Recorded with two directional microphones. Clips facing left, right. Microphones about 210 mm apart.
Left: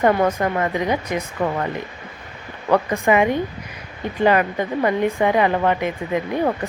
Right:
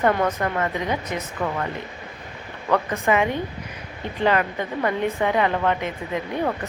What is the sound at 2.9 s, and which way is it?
Speech, 15° left (ahead or behind).